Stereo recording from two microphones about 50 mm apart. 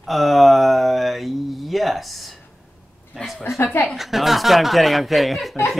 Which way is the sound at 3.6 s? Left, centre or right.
Left.